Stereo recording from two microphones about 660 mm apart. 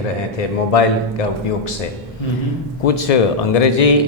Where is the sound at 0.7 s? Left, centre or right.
Left.